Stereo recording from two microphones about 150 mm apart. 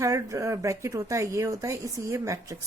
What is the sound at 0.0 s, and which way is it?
Speech, 20° right (ahead or behind).